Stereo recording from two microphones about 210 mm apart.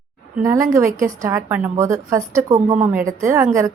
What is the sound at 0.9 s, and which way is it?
A woman's voice, 15° right (ahead or behind).